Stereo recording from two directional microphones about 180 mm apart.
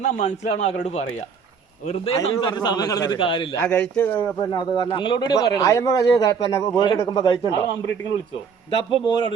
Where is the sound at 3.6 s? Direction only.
10° left (ahead or behind).